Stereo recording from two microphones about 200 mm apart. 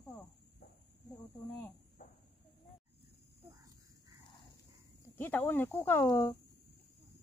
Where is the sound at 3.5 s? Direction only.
15° right (ahead or behind).